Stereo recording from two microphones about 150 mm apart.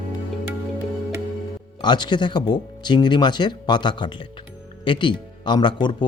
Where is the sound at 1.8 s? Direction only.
30° left (ahead or behind).